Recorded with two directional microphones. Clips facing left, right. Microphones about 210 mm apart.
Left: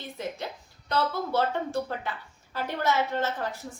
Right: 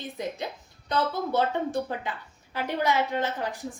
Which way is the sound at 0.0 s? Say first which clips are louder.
Right 2 dB; 15° right (ahead or behind).